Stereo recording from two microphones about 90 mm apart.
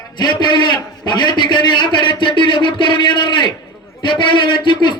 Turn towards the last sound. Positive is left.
turn(degrees=60)  # may be behind; listen again after turning